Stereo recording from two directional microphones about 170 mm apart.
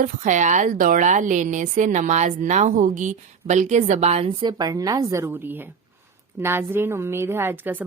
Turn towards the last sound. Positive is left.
turn(degrees=-10)  # may be behind; listen again after turning